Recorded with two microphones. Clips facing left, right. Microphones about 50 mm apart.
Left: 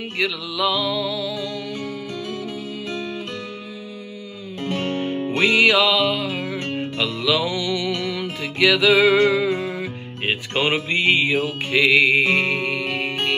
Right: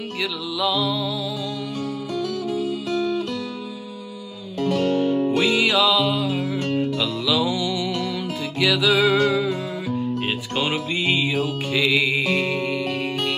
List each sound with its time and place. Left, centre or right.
0.2 s music: left
4.6 s music: left